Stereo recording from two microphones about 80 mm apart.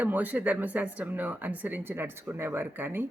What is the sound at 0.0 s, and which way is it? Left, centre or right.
Speech, right.